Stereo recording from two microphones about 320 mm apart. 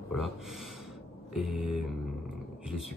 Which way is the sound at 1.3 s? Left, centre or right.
Centre.